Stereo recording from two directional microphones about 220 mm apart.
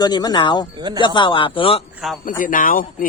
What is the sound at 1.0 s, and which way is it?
Speech, 20° left (ahead or behind).